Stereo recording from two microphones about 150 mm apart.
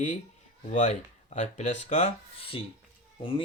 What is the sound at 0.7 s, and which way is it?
Speech, 55° left (ahead or behind).